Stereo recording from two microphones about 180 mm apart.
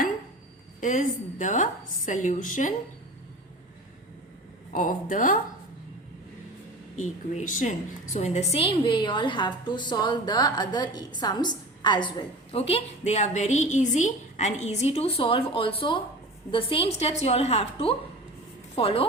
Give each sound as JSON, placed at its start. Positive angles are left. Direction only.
{"t": 0.8, "sound": "a woman's voice", "side_deg": 45}
{"t": 4.7, "sound": "a woman's voice", "side_deg": 45}
{"t": 7.0, "sound": "a woman's voice", "side_deg": 45}